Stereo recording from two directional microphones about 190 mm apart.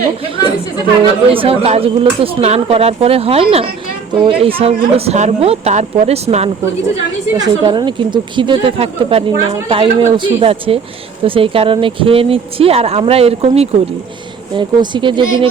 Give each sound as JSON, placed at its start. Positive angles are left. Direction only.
{"t": 1.3, "sound": "speech", "side_deg": -30}
{"t": 7.3, "sound": "speech", "side_deg": -20}